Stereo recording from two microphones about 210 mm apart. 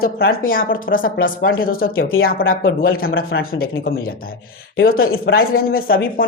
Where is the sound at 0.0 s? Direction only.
45° left (ahead or behind).